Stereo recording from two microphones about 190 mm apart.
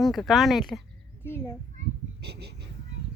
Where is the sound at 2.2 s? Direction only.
60° right (ahead or behind).